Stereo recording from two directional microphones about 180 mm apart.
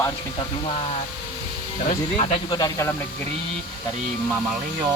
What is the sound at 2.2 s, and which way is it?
Speech, 35° left (ahead or behind).